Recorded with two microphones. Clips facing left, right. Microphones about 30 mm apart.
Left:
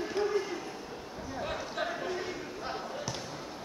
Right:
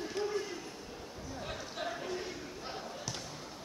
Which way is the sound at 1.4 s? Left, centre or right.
Centre.